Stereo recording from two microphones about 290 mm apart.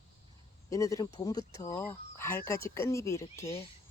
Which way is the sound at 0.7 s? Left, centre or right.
Centre.